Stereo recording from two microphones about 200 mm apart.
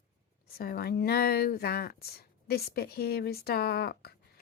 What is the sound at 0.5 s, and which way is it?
A woman's voice, 50° left (ahead or behind).